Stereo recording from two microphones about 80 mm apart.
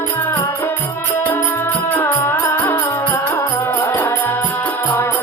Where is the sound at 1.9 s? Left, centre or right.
Left.